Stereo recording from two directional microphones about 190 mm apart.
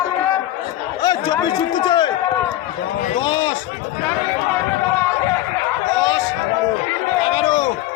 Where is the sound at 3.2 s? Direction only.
25° left (ahead or behind).